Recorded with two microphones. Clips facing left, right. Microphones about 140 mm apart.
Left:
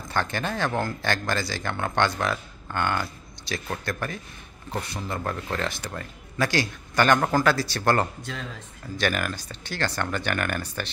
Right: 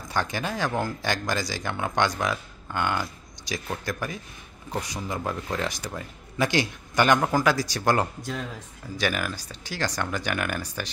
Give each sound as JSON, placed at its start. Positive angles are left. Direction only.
{"t": 0.1, "sound": "speech", "side_deg": -10}